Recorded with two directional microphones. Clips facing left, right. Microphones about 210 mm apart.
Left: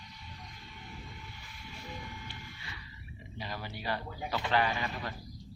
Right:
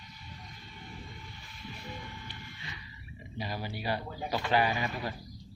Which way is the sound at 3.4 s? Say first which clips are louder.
Right 4 dB; 10° right (ahead or behind).